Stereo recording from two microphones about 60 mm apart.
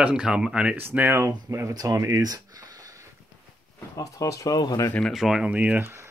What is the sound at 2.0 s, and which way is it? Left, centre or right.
Speech, right.